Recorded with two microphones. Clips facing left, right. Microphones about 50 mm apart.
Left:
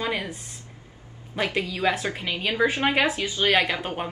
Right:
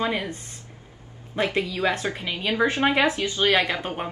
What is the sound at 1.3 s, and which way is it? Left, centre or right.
Speech, right.